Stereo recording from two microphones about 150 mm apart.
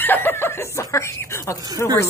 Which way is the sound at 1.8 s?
15° left (ahead or behind).